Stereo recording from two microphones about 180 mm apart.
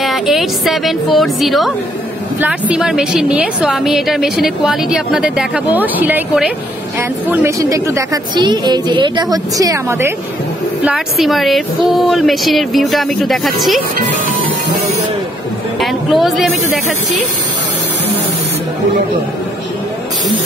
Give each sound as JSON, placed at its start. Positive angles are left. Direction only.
{"t": 0.0, "sound": "a woman's voice", "side_deg": 0}
{"t": 10.9, "sound": "a woman's voice", "side_deg": 0}
{"t": 15.8, "sound": "a woman's voice", "side_deg": 0}